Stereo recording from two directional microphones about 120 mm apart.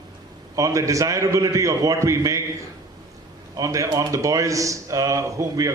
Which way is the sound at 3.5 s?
25° right (ahead or behind).